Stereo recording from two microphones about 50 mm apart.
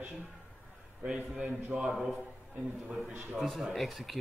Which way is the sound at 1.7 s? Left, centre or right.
Right.